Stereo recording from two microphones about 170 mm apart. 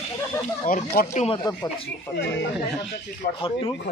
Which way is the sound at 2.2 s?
90° left.